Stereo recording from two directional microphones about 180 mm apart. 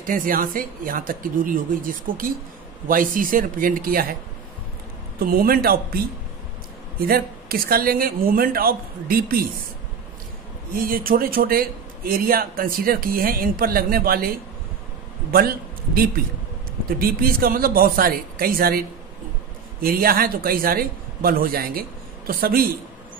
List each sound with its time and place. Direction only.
0.0 s speech: 50° right (ahead or behind)
5.2 s a man's voice: 55° right (ahead or behind)
7.0 s a man's voice: 55° right (ahead or behind)
10.7 s speech: 55° right (ahead or behind)
15.3 s a man's voice: 55° right (ahead or behind)